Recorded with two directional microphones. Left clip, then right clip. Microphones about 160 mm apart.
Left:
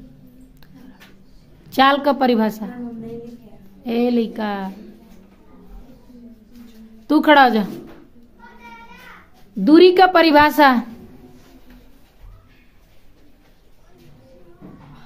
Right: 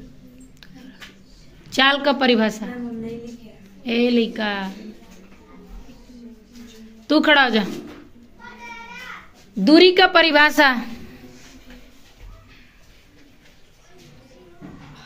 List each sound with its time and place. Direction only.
1.7 s a woman's voice: 35° left (ahead or behind)
3.8 s a woman's voice: 35° left (ahead or behind)
7.1 s a woman's voice: 35° left (ahead or behind)
9.7 s a woman's voice: 40° left (ahead or behind); by 10.8 s 20° left (ahead or behind)